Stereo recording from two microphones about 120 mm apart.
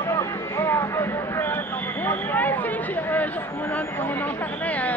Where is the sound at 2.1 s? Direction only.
15° left (ahead or behind).